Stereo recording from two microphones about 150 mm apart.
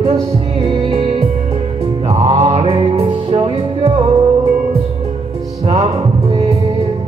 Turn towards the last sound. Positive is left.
turn(degrees=-40)  # may be behind; listen again after turning